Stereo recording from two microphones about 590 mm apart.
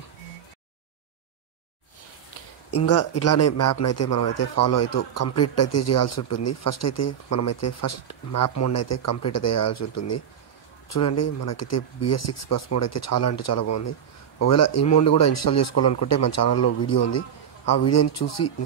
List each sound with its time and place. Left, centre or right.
2.7 s a man's voice: left